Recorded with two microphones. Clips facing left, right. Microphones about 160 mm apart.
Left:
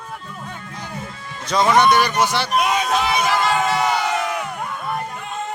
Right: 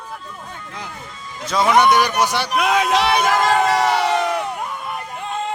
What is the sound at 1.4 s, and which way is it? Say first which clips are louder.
A man's voice: even; 5° right (ahead or behind).